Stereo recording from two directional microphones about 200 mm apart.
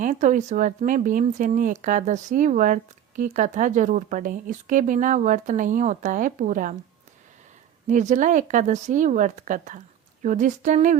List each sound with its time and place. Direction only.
0.0 s speech: 40° right (ahead or behind)
7.9 s speech: 40° right (ahead or behind)